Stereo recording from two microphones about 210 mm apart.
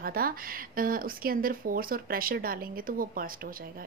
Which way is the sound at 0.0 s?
45° right (ahead or behind).